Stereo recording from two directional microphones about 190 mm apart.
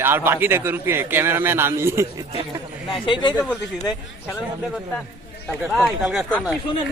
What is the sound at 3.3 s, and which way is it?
Speech, 10° right (ahead or behind).